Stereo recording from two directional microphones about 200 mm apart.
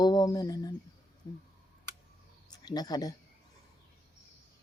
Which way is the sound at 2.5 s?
20° left (ahead or behind).